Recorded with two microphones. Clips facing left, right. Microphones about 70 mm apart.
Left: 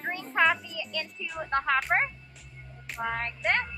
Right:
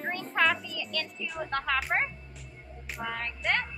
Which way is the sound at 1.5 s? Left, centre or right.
Left.